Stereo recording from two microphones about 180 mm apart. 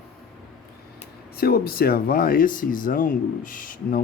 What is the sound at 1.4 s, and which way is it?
Speech, 55° left (ahead or behind).